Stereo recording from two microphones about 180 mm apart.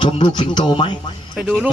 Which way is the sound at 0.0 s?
25° left (ahead or behind).